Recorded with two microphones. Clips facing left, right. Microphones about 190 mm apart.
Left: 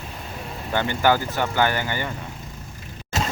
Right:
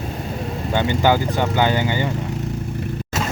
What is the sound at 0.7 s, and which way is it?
Speech, 15° right (ahead or behind).